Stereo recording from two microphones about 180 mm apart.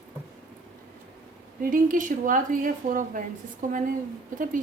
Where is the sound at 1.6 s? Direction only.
50° right (ahead or behind).